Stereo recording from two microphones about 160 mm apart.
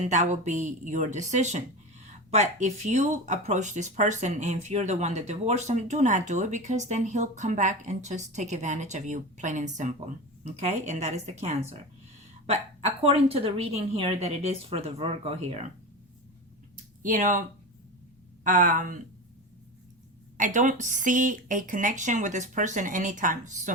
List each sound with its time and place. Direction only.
0.0 s a woman's voice: 45° right (ahead or behind)
16.7 s a sound: 55° right (ahead or behind)
18.4 s speech: 55° right (ahead or behind)
20.3 s speech: 55° right (ahead or behind)